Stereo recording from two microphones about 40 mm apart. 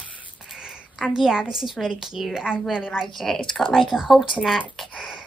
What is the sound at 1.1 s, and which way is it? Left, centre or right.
A woman's voice, centre.